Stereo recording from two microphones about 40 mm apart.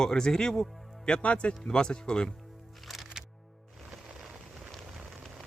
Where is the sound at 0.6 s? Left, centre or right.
Centre.